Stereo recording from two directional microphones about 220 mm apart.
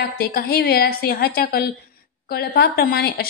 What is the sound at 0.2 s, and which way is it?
Speech, 45° left (ahead or behind).